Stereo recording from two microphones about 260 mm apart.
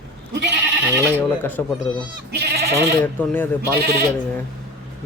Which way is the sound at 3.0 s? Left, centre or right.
Centre.